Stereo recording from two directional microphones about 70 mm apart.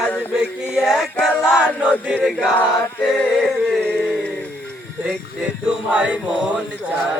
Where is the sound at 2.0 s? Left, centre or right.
Centre.